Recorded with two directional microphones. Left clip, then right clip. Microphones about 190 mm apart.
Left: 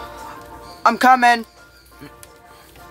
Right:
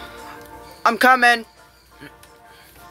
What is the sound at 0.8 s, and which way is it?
Speech, centre (ahead or behind).